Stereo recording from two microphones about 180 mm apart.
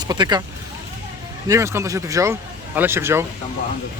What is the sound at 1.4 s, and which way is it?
Speech, 15° right (ahead or behind).